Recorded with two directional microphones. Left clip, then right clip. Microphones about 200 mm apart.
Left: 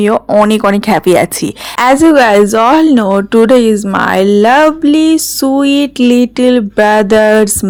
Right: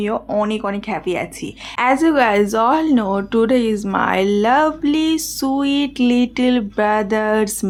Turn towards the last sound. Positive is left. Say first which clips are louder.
# left 10 dB
turn(degrees=35)  # may be behind; listen again after turning